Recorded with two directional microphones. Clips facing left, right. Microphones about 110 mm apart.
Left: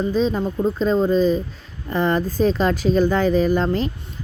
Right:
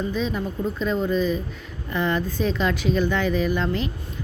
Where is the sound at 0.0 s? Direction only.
35° left (ahead or behind).